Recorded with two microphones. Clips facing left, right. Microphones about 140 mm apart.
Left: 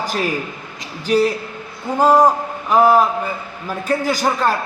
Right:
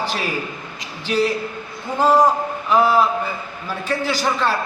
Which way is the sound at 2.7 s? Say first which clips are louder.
Left 3 dB; 45° left (ahead or behind).